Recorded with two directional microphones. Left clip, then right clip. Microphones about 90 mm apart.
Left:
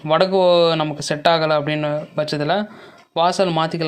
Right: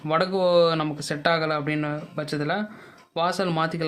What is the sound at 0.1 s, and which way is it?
Speech, 15° left (ahead or behind).